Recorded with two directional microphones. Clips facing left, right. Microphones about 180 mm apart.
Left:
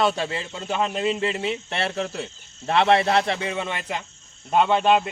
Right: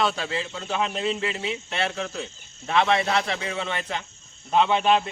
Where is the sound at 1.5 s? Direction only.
35° left (ahead or behind).